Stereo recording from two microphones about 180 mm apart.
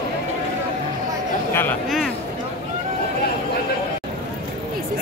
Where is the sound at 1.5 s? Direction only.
10° left (ahead or behind).